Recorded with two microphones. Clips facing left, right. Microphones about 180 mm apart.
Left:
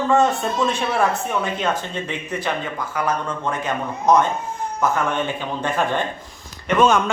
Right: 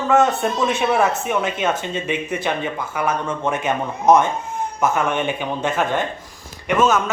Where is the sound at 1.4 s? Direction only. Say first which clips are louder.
Right 1 dB; 20° right (ahead or behind).